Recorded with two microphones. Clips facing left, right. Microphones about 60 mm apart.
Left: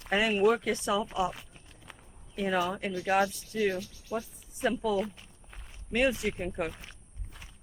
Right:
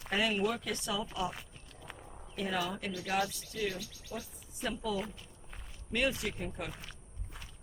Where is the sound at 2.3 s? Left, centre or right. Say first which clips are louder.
Left 6 dB; left.